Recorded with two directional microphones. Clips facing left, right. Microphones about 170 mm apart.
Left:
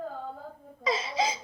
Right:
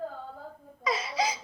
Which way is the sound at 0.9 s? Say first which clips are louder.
Left 1 dB; 25° left (ahead or behind).